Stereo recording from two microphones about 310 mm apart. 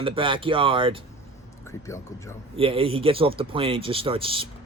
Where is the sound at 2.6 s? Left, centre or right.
Centre.